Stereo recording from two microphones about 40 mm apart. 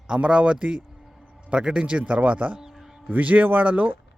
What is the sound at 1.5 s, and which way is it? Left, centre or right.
Speech, right.